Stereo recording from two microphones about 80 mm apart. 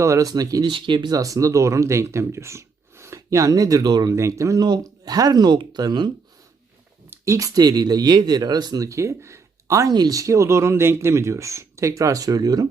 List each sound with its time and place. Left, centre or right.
0.0 s speech: right
0.7 s speech: right
1.1 s speech: right
4.1 s speech: right
4.6 s speech: right
7.3 s speech: right
9.9 s speech: right